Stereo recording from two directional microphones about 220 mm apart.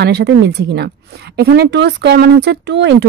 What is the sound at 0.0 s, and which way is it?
A woman's voice, 50° right (ahead or behind).